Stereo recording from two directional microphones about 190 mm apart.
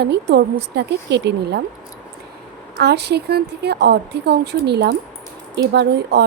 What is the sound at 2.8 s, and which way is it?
Speech, 60° right (ahead or behind).